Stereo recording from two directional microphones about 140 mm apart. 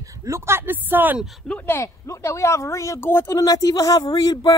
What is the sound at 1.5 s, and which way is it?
Speech, 20° left (ahead or behind).